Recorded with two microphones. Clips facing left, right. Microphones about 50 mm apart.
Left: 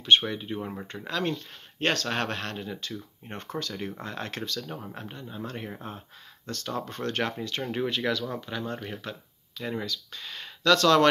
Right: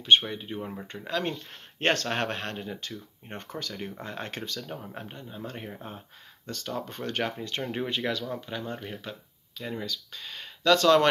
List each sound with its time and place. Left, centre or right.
0.3 s speech: centre
0.6 s speech: centre
0.9 s speech: centre
1.8 s speech: right
2.0 s speech: centre
10.6 s speech: centre